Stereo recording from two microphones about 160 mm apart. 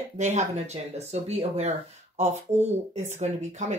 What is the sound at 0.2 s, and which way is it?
Speech, 45° right (ahead or behind).